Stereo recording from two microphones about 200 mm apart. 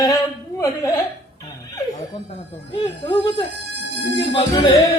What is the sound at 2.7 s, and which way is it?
Speech, 25° left (ahead or behind).